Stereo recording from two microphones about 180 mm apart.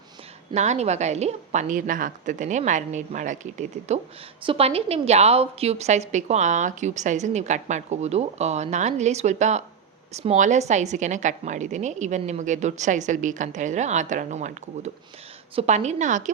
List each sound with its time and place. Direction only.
0.5 s a woman's voice: 40° right (ahead or behind)